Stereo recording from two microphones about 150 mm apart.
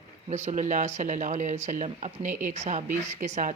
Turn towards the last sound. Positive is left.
turn(degrees=-50)  # may be behind; listen again after turning